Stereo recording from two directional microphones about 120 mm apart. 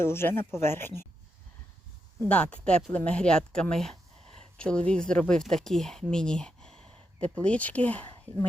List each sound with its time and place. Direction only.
0.0 s speech: 20° left (ahead or behind)
2.3 s speech: 10° left (ahead or behind)